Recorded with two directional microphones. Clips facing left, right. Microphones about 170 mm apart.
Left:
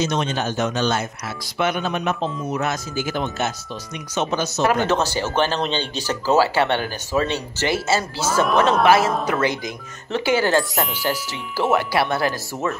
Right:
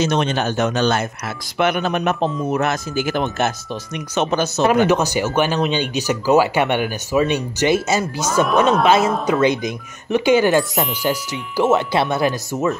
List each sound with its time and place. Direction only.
0.0 s a man's voice: 65° right (ahead or behind)
4.6 s speech: 15° right (ahead or behind)